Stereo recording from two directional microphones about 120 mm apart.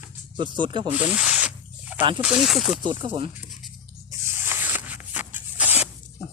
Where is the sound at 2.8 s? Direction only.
40° right (ahead or behind).